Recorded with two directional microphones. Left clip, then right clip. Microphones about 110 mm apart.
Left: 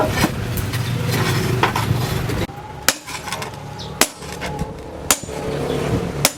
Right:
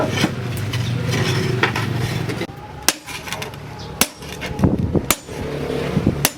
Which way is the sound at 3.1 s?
5° left (ahead or behind).